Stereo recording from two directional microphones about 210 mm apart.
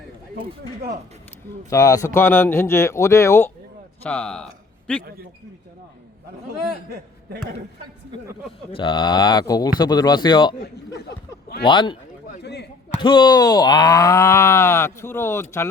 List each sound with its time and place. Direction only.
1.7 s speech: 15° left (ahead or behind)
8.7 s speech: 20° left (ahead or behind)
11.6 s speech: 20° left (ahead or behind)
12.4 s speech: 50° left (ahead or behind)
12.9 s speech: 20° left (ahead or behind)